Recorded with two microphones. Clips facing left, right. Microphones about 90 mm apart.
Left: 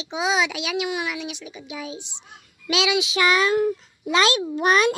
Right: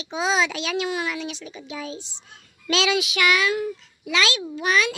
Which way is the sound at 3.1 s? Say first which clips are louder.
Left 2 dB; 30° left (ahead or behind).